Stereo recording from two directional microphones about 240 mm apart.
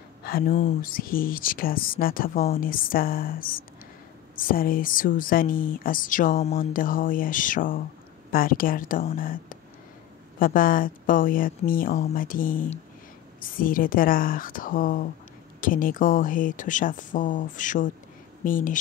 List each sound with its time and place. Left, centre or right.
0.2 s speech: left